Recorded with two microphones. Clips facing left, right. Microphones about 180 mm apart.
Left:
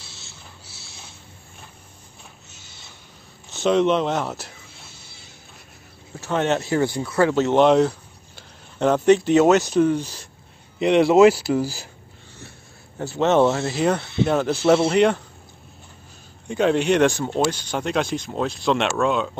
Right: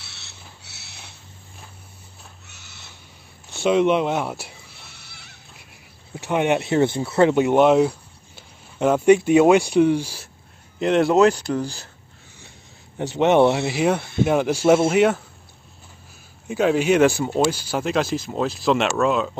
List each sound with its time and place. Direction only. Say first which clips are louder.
0.0 s a sound: left 1 dB; 70° right (ahead or behind)
2.5 s a sound: even; 65° right (ahead or behind)
3.6 s speech: right 1 dB; 10° right (ahead or behind)
4.6 s a sound: left 1 dB; 65° right (ahead or behind)
6.2 s speech: right 1 dB; 15° right (ahead or behind)
7.3 s speech: left 2 dB; 10° right (ahead or behind)
10.8 s speech: left 2 dB; centre (ahead or behind)
12.4 s speech: left 5 dB; 15° right (ahead or behind)
16.4 s speech: right 1 dB; 5° right (ahead or behind)